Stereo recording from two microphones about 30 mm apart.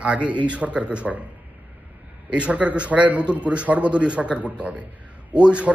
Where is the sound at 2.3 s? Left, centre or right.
Right.